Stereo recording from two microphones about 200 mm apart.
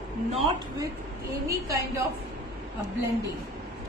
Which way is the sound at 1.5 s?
15° right (ahead or behind).